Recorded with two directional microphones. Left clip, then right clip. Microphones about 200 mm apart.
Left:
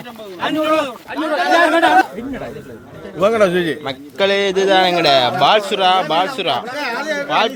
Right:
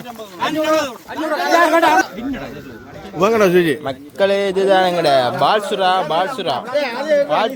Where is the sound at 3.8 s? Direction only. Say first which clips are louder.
Even; centre (ahead or behind).